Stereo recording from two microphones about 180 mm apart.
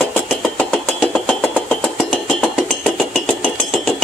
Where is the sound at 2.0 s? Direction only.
5° right (ahead or behind).